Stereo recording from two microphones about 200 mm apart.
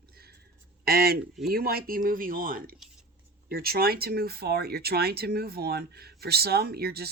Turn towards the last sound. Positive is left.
turn(degrees=-50)  # may be behind; listen again after turning